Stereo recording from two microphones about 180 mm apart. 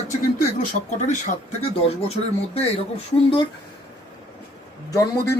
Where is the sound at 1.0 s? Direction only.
40° left (ahead or behind).